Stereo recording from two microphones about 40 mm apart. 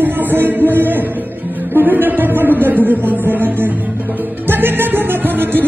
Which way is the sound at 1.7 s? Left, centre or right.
Right.